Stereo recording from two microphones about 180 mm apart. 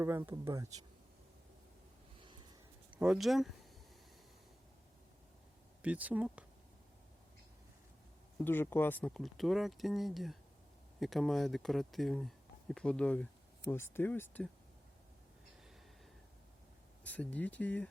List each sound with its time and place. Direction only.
0.0 s speech: 10° right (ahead or behind)
2.1 s a sound: 25° right (ahead or behind)
3.0 s speech: centre (ahead or behind)
5.8 s speech: 10° right (ahead or behind)
8.4 s speech: 10° left (ahead or behind)
17.0 s speech: 10° left (ahead or behind)